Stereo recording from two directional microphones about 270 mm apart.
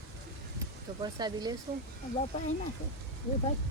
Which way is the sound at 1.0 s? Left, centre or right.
Centre.